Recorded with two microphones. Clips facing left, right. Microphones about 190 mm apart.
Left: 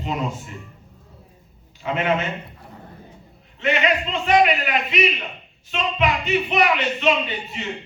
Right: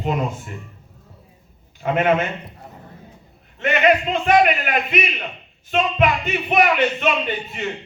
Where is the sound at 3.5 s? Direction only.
50° right (ahead or behind).